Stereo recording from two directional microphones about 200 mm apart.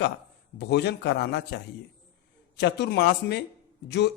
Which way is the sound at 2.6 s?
55° left (ahead or behind).